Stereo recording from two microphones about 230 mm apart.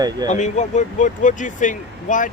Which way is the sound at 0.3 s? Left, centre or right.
Left.